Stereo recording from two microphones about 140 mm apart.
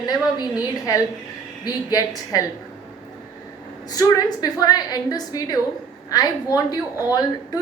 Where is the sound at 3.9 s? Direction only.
25° left (ahead or behind).